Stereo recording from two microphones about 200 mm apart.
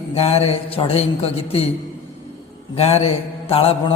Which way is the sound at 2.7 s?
30° left (ahead or behind).